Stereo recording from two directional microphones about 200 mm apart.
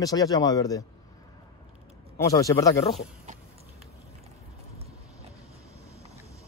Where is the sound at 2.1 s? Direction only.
15° left (ahead or behind).